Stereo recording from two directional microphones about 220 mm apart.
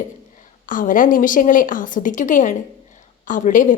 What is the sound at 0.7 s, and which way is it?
Speech, 35° left (ahead or behind).